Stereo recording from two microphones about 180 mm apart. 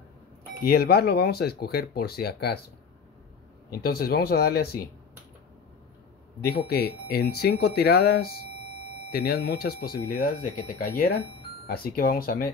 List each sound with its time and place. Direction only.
0.7 s speech: 60° left (ahead or behind)
3.8 s speech: 55° left (ahead or behind)
6.7 s speech: 60° left (ahead or behind)